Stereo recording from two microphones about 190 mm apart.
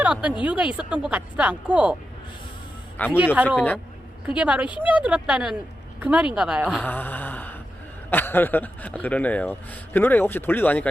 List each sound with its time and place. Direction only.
0.0 s speech: 5° right (ahead or behind)
3.0 s a man's voice: 10° left (ahead or behind)
4.4 s speech: 5° right (ahead or behind)
6.7 s mantra: 10° left (ahead or behind)
8.1 s a man's voice: 10° left (ahead or behind)